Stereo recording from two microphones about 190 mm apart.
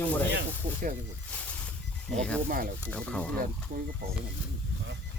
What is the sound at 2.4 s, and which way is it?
Speech, 50° right (ahead or behind).